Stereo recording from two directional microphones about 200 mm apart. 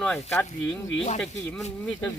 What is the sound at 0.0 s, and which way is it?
Speech, 10° left (ahead or behind).